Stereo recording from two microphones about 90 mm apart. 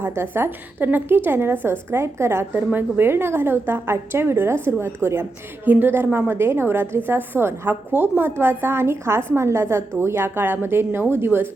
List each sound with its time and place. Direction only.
0.0 s a woman's voice: 25° right (ahead or behind)